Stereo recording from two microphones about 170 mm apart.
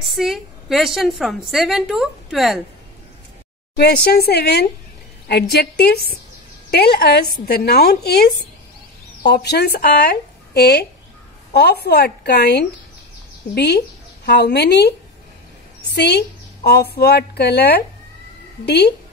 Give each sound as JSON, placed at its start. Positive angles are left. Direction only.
{"t": 0.0, "sound": "a woman's voice", "side_deg": 0}
{"t": 3.7, "sound": "a woman's voice", "side_deg": 70}
{"t": 9.3, "sound": "a woman's voice", "side_deg": 75}